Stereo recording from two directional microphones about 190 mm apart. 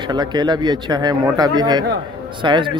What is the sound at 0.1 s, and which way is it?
A man's voice, 20° right (ahead or behind).